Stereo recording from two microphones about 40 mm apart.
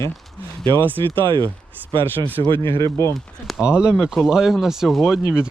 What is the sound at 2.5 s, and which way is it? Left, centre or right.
Speech, left.